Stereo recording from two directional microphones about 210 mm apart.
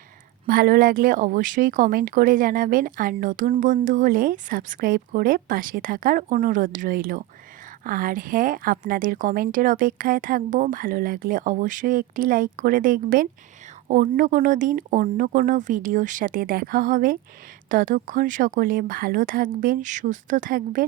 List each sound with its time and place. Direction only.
0.4 s speech: 45° right (ahead or behind)